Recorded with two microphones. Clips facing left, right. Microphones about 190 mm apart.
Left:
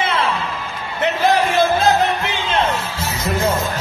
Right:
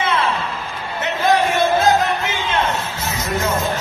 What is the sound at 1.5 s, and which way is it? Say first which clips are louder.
Music: even; 30° left (ahead or behind).